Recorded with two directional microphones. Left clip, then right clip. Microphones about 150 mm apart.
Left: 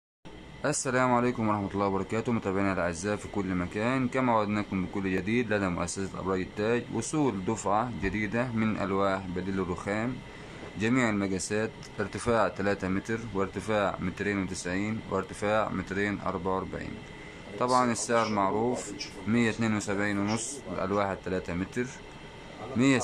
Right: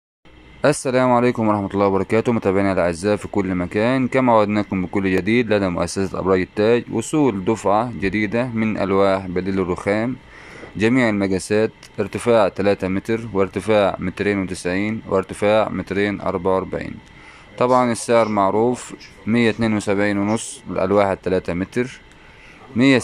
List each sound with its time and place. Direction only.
0.6 s speech: 30° right (ahead or behind)